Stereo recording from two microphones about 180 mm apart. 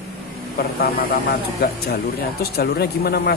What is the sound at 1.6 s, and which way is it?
Speech, 60° left (ahead or behind).